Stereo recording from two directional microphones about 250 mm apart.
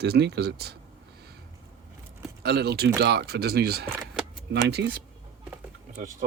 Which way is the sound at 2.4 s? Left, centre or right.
Right.